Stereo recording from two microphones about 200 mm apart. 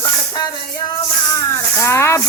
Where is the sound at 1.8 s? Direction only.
15° left (ahead or behind).